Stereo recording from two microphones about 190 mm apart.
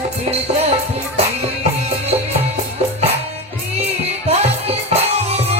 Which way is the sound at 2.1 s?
30° right (ahead or behind).